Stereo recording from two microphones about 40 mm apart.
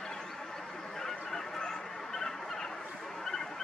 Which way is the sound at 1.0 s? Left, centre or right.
Centre.